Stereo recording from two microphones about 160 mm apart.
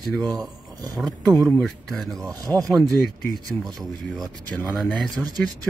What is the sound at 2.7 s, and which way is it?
Speech, centre (ahead or behind).